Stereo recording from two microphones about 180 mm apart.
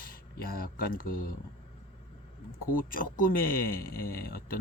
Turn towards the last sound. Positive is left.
turn(degrees=55)  # may be behind; listen again after turning